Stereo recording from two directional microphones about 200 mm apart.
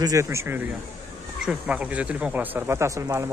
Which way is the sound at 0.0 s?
15° right (ahead or behind).